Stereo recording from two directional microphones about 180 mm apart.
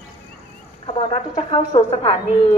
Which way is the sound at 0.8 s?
30° left (ahead or behind).